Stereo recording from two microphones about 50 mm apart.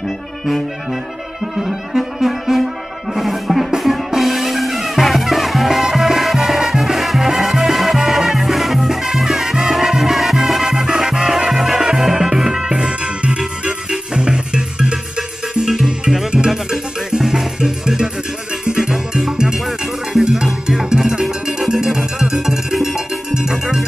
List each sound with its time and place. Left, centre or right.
1.6 s music: centre
15.6 s music: centre